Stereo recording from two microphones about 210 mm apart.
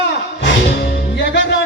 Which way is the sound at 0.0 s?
55° left (ahead or behind).